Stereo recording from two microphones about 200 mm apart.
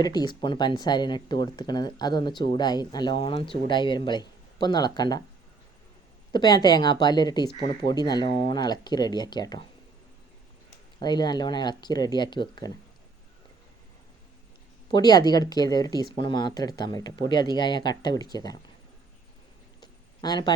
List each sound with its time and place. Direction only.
0.0 s speech: 20° left (ahead or behind)
6.3 s speech: 20° left (ahead or behind)
11.0 s speech: 20° left (ahead or behind)
14.8 s speech: 20° left (ahead or behind)
19.8 s a sound: 20° left (ahead or behind)